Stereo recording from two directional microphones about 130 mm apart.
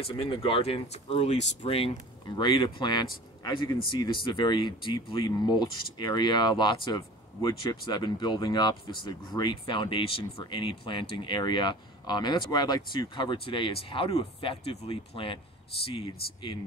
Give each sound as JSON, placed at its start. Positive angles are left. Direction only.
{"t": 0.0, "sound": "speech", "side_deg": 40}
{"t": 2.3, "sound": "speech", "side_deg": 35}